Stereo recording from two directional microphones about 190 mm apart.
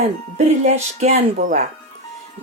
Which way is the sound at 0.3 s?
35° right (ahead or behind).